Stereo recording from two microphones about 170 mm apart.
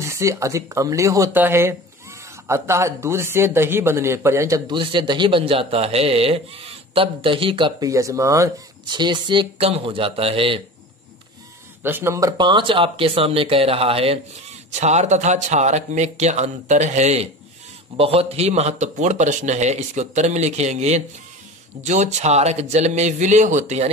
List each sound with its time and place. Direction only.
0.0 s speech: 15° right (ahead or behind)
4.7 s speech: 30° right (ahead or behind)
11.8 s speech: 15° right (ahead or behind); by 23.9 s 45° right (ahead or behind)